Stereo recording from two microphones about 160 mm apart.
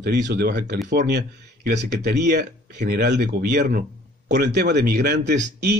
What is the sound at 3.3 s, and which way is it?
Speech, 80° right.